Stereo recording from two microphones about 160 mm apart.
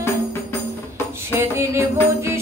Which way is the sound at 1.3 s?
15° right (ahead or behind).